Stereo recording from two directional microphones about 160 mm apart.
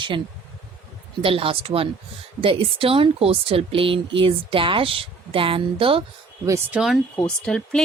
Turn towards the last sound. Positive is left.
turn(degrees=5)  # may be behind; listen again after turning